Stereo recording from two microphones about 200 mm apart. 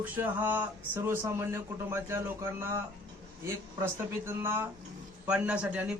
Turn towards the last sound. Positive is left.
turn(degrees=-5)  # may be behind; listen again after turning